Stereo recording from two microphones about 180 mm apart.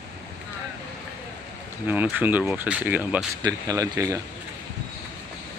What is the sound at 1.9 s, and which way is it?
Speech, 10° right (ahead or behind).